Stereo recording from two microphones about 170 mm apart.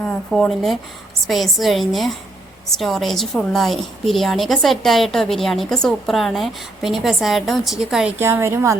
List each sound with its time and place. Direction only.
0.0 s a woman's voice: 5° left (ahead or behind)
8.2 s a woman's voice: 15° right (ahead or behind)